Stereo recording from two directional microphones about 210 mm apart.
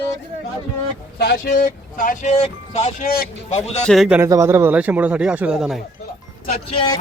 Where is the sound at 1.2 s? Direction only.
45° left (ahead or behind).